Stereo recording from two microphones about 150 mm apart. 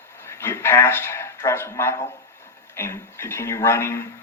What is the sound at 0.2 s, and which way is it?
Speech, 15° left (ahead or behind).